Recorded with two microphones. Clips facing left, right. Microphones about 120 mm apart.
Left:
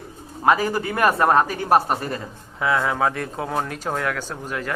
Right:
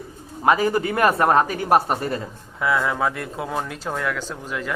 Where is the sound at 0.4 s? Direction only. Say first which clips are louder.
Right 1 dB; 25° right (ahead or behind).